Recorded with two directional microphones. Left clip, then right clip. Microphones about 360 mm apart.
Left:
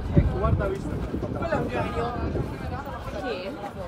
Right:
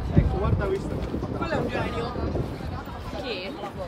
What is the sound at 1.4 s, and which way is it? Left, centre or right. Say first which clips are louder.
Speech: left 1 dB; centre.